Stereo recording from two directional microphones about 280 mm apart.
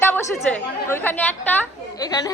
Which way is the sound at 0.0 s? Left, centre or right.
Centre.